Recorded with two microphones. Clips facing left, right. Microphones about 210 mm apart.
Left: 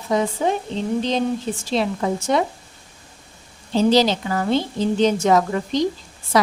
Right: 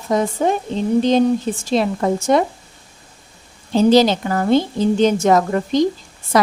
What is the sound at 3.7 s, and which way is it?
A woman's voice, 50° right (ahead or behind).